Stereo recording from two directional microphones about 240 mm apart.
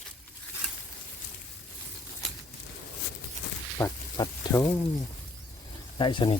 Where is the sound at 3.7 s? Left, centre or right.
Centre.